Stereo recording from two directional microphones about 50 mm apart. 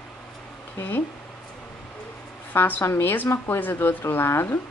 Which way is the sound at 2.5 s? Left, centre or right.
Left.